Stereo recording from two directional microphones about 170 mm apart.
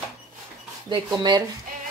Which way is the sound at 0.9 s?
25° right (ahead or behind).